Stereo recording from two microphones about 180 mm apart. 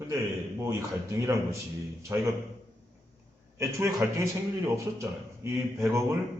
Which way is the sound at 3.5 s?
15° right (ahead or behind).